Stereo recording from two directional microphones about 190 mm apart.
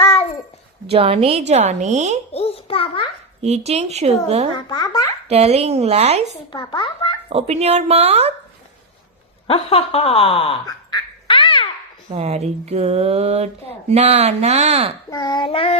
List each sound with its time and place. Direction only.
0.0 s babbling: 35° left (ahead or behind)
0.9 s speech: 30° right (ahead or behind)
2.3 s a sound: 30° left (ahead or behind)
3.4 s speech: 35° right (ahead or behind)
4.5 s speech: 20° left (ahead or behind)
5.3 s speech: 35° right (ahead or behind)
6.5 s a child's voice: 25° left (ahead or behind)
7.3 s speech: 35° right (ahead or behind)
9.5 s speech: 30° left (ahead or behind)
11.3 s babbling: 25° left (ahead or behind)
12.1 s speech: 35° right (ahead or behind)
15.1 s speech: 20° left (ahead or behind)